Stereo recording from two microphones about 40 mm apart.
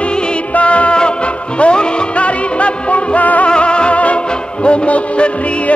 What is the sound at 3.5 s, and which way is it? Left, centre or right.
Music, left.